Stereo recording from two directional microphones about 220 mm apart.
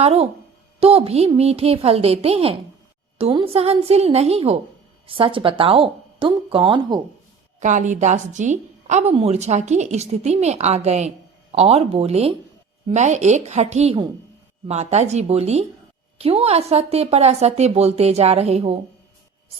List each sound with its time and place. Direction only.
0.0 s speech: 30° right (ahead or behind)
7.6 s a woman's voice: 35° right (ahead or behind)